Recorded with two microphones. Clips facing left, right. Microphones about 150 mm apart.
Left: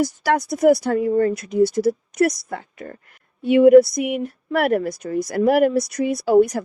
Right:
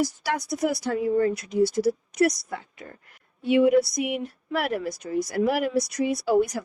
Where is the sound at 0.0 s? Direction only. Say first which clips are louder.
Left 6 dB; 55° left (ahead or behind).